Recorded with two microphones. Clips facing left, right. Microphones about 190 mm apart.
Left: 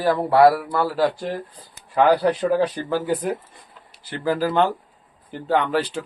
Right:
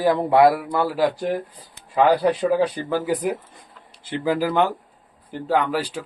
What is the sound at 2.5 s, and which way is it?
Speech, 10° right (ahead or behind).